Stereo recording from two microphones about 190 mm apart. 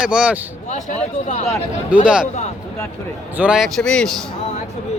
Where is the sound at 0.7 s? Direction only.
40° left (ahead or behind).